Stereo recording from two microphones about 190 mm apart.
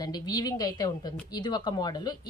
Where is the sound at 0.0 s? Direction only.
20° left (ahead or behind).